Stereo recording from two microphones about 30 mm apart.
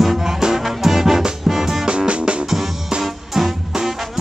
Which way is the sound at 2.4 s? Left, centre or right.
Centre.